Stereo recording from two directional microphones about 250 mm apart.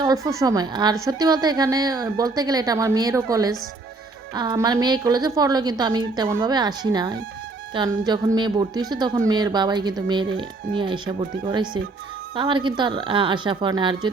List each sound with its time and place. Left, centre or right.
0.0 s a woman's voice: centre